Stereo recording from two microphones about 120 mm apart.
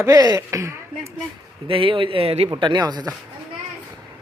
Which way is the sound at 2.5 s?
40° right (ahead or behind).